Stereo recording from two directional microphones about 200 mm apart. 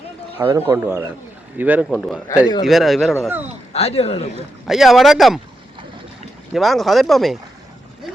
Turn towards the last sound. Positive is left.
turn(degrees=0)  # may be behind; listen again after turning